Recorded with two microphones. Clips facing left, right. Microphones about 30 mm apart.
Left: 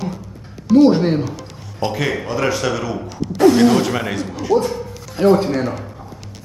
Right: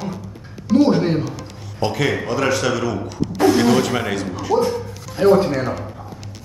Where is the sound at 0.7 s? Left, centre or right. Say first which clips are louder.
Left 3 dB; centre.